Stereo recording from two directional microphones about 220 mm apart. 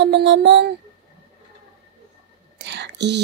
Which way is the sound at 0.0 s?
50° right (ahead or behind).